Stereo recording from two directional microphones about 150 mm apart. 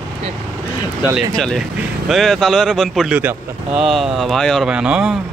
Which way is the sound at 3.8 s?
Centre (ahead or behind).